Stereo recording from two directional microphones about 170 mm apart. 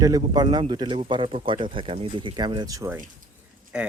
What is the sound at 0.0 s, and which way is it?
Speech, 20° right (ahead or behind).